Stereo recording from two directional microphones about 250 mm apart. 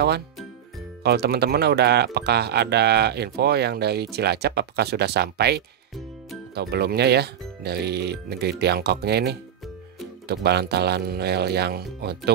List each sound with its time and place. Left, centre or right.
1.0 s speech: right